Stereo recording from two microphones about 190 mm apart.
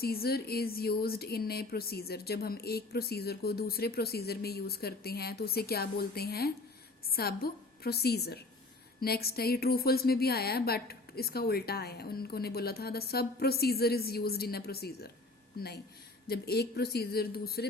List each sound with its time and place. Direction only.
0.0 s speech: 55° left (ahead or behind)